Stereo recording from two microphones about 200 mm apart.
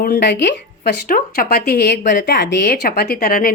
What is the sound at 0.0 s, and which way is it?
Speech, 55° left (ahead or behind).